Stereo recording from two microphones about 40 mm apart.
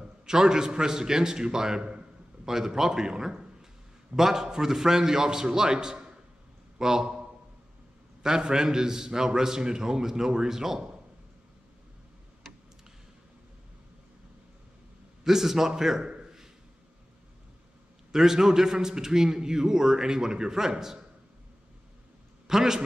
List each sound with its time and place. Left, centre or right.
0.0 s a man's voice: centre
2.4 s a man's voice: centre
15.2 s a man's voice: centre
18.1 s a man's voice: centre
22.5 s a man's voice: centre